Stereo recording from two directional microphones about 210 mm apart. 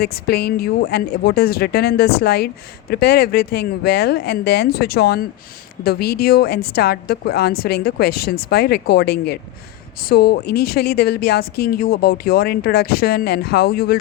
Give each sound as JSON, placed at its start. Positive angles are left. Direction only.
{"t": 0.0, "sound": "speech", "side_deg": 50}